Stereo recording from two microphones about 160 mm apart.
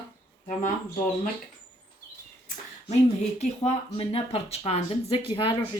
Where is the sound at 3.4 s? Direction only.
45° left (ahead or behind).